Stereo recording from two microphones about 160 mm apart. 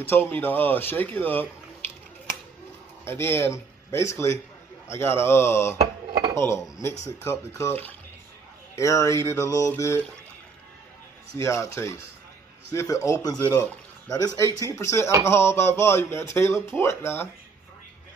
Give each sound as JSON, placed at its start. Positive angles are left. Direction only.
{"t": 0.0, "sound": "speech", "side_deg": 10}
{"t": 3.1, "sound": "speech", "side_deg": 15}
{"t": 11.3, "sound": "speech", "side_deg": 20}